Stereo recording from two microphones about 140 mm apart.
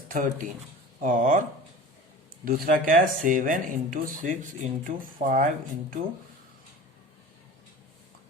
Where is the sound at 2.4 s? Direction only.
90° right; by 5.5 s 70° right (ahead or behind).